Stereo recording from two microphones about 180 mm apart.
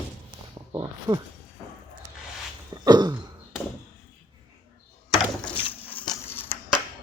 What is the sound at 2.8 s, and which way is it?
Speech, 25° right (ahead or behind).